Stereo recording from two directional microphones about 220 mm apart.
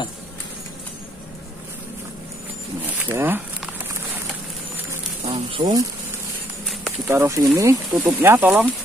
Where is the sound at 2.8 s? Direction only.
10° right (ahead or behind).